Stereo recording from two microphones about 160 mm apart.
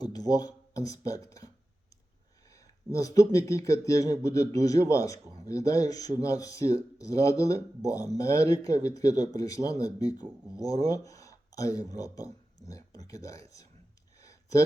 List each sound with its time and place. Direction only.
0.0 s speech: 25° left (ahead or behind)
2.9 s speech: 20° left (ahead or behind)
14.2 s a sound: 20° left (ahead or behind)